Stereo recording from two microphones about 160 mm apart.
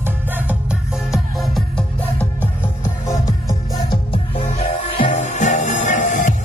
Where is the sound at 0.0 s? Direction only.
10° right (ahead or behind).